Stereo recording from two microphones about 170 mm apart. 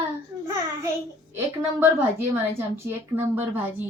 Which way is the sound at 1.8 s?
15° right (ahead or behind).